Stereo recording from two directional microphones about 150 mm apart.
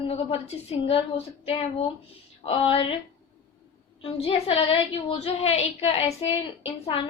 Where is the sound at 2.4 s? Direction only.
40° left (ahead or behind).